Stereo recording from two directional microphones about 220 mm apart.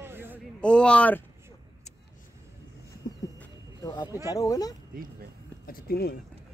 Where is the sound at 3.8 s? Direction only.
20° left (ahead or behind).